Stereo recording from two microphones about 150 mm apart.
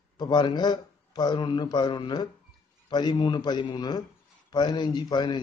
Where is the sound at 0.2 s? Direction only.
30° left (ahead or behind).